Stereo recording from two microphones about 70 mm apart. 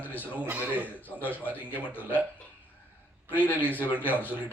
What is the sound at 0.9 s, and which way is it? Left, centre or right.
A man's voice, left.